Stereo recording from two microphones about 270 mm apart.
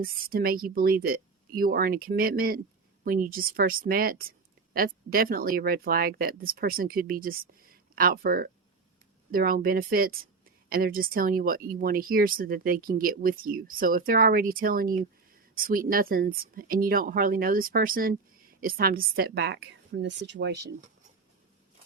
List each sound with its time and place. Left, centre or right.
0.0 s speech: right